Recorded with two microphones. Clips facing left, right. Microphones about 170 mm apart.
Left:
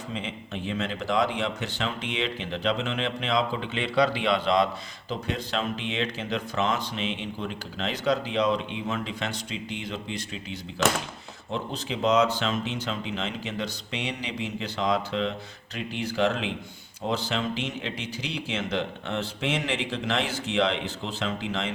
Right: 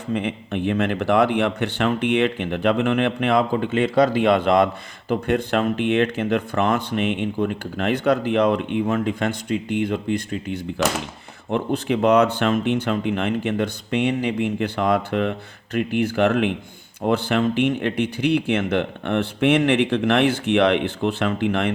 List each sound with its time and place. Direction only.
0.1 s speech: 60° right (ahead or behind)